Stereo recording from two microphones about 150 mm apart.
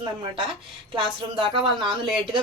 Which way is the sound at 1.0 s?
35° right (ahead or behind).